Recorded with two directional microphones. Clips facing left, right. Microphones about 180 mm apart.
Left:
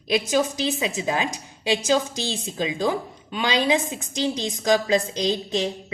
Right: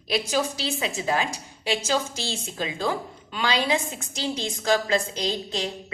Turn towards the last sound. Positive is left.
turn(degrees=15)  # may be behind; listen again after turning